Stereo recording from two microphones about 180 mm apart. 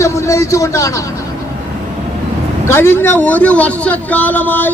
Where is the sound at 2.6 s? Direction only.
15° left (ahead or behind).